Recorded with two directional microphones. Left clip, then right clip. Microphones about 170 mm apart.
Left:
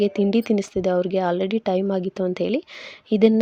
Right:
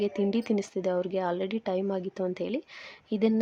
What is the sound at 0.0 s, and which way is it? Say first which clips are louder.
Speech: left 8 dB; 30° left (ahead or behind).